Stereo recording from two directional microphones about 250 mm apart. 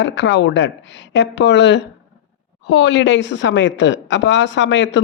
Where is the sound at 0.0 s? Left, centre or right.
Left.